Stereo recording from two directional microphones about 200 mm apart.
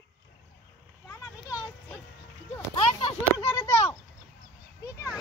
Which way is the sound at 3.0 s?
25° left (ahead or behind).